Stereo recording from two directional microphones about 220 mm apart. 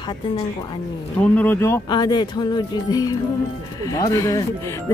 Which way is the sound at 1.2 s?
5° left (ahead or behind).